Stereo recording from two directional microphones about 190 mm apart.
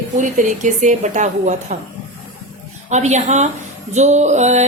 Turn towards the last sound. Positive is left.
turn(degrees=-35)  # may be behind; listen again after turning